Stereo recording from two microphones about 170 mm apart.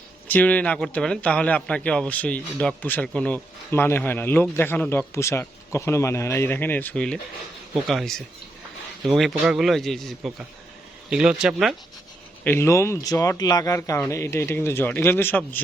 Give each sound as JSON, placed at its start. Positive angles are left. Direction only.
{"t": 0.3, "sound": "speech", "side_deg": 10}
{"t": 12.5, "sound": "speech", "side_deg": 15}